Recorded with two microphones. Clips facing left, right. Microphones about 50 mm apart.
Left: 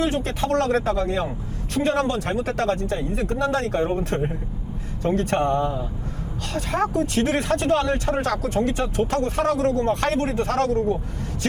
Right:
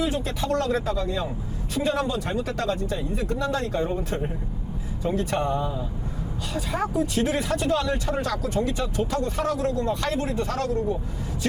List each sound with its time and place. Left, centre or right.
0.0 s speech: left